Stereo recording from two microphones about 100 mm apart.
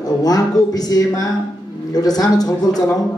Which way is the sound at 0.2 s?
40° left (ahead or behind).